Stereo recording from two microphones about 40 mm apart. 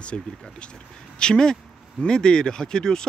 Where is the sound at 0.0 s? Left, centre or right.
Left.